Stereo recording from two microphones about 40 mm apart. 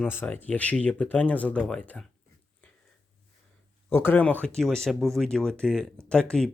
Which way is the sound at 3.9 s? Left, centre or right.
Left.